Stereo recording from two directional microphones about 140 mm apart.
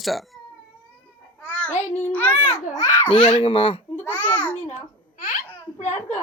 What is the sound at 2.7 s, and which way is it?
Speech, 25° left (ahead or behind).